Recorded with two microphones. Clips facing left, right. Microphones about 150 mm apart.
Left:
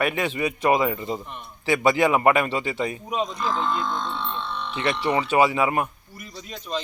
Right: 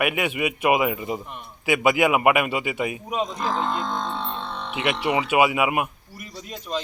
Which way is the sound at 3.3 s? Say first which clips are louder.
Even; 45° right (ahead or behind).